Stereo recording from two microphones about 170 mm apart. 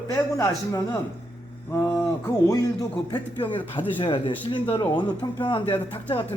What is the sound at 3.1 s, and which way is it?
Speech, 30° left (ahead or behind).